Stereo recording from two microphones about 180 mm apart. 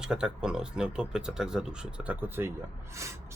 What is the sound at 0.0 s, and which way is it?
Speech, 5° right (ahead or behind).